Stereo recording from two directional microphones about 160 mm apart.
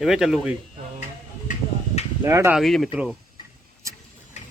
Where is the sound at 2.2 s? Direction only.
15° right (ahead or behind).